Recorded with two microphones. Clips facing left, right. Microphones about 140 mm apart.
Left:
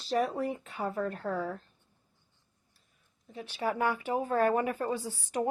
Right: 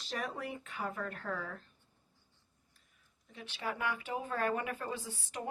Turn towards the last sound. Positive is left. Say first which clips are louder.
# left 9 dB
turn(degrees=35)  # may be behind; listen again after turning